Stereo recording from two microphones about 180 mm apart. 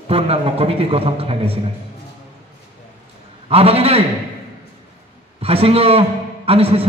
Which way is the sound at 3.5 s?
35° right (ahead or behind).